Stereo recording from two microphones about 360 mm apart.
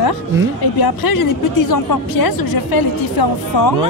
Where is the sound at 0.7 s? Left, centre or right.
Left.